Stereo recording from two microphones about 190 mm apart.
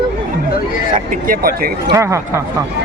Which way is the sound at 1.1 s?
50° right (ahead or behind).